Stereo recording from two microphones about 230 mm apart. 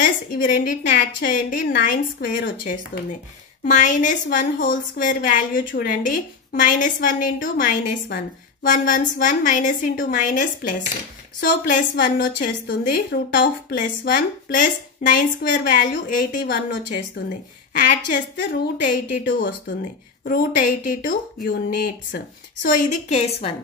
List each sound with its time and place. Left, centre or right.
0.0 s a woman's voice: left